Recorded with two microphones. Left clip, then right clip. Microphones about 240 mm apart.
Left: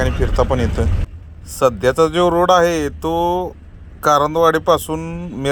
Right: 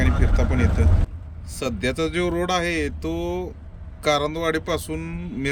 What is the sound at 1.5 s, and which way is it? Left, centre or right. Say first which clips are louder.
Speech: left 11 dB; centre.